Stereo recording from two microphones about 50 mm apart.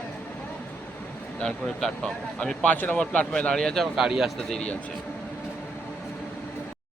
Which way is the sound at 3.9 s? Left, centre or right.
Centre.